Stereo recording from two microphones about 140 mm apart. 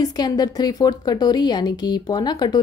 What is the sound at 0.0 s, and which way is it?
A woman's voice, 30° left (ahead or behind).